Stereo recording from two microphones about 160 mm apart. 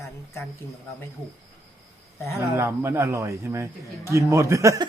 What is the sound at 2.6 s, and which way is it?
A man's voice, 15° right (ahead or behind).